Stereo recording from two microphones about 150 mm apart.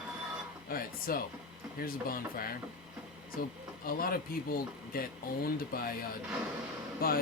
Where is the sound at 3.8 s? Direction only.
75° left (ahead or behind).